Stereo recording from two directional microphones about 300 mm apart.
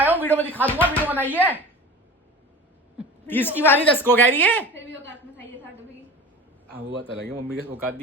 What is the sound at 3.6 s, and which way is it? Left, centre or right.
A woman's voice, centre.